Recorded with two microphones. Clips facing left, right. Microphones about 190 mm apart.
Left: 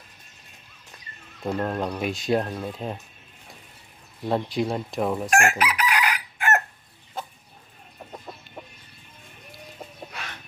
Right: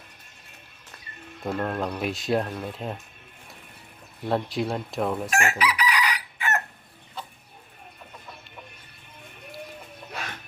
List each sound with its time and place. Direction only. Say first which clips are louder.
1.4 s speech: left 1 dB; centre (ahead or behind)
4.3 s speech: left 1 dB; centre (ahead or behind)
5.3 s chicken: left 3 dB; 50° left (ahead or behind)